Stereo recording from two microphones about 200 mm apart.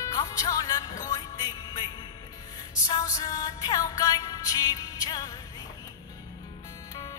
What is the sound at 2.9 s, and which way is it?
Music, 20° left (ahead or behind).